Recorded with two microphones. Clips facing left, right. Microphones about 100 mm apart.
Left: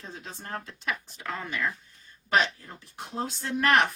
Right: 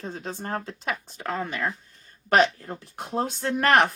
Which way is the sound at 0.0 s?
35° right (ahead or behind).